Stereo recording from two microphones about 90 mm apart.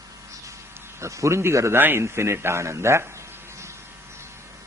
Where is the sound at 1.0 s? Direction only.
35° right (ahead or behind).